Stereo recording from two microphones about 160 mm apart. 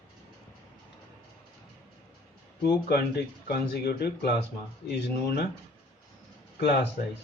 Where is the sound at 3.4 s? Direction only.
80° left.